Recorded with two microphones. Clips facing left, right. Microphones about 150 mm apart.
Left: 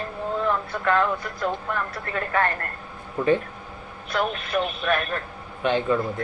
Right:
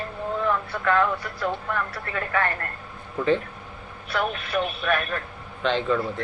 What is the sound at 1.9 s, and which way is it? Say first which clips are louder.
Speech: left 1 dB; 40° left (ahead or behind).